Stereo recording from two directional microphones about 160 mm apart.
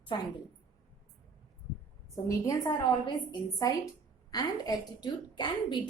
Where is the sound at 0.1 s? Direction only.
30° left (ahead or behind).